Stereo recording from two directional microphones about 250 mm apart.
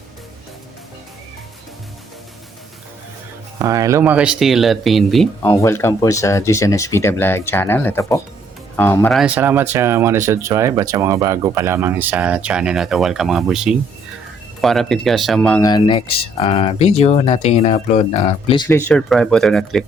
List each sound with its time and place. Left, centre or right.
3.6 s speech: centre